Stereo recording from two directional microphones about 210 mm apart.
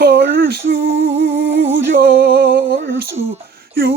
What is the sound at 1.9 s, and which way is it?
Music, 45° right (ahead or behind).